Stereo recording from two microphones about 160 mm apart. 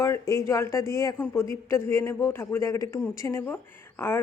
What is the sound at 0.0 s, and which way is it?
Speech, 20° left (ahead or behind).